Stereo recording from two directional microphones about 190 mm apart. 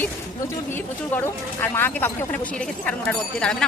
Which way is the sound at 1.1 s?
10° left (ahead or behind).